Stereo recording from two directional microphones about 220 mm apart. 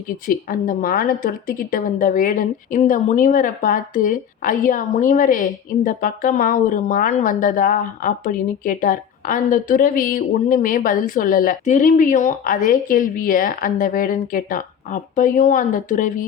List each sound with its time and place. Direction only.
0.4 s a woman's voice: 40° left (ahead or behind)